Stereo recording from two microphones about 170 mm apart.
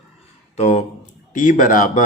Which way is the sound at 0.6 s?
45° left (ahead or behind).